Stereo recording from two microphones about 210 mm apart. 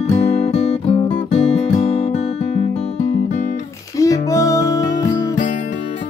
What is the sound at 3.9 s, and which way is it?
Music, 15° left (ahead or behind).